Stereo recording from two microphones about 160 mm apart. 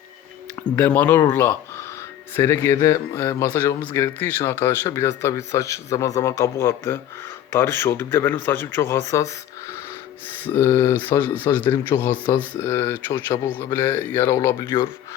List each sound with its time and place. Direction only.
0.8 s speech: 10° left (ahead or behind)
10.4 s speech: 15° left (ahead or behind)